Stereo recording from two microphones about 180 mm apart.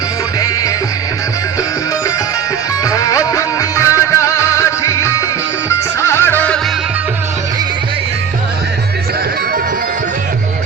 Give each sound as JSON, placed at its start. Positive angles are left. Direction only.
{"t": 2.8, "sound": "music", "side_deg": 20}